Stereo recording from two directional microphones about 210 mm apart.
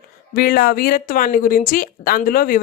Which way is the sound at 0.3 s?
45° left (ahead or behind).